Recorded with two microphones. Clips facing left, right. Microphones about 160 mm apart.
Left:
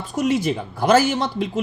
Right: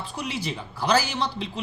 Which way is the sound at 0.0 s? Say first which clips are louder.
Left 11 dB; 45° left (ahead or behind).